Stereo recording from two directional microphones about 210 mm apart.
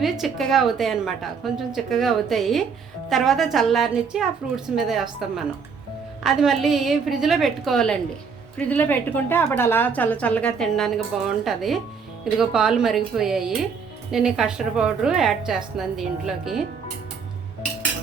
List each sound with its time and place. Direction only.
0.0 s a woman's voice: centre (ahead or behind)
6.2 s a woman's voice: centre (ahead or behind)